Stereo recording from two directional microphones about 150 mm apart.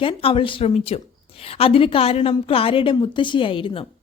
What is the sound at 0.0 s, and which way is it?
A woman's voice, 35° left (ahead or behind).